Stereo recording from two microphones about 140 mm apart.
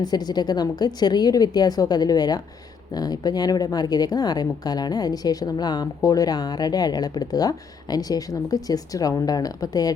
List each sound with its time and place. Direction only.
0.0 s a woman's voice: 30° left (ahead or behind)